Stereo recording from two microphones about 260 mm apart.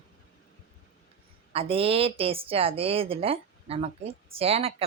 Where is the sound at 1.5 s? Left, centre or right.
Right.